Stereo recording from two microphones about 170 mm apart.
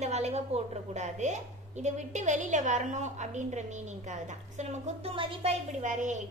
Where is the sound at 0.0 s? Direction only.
40° right (ahead or behind).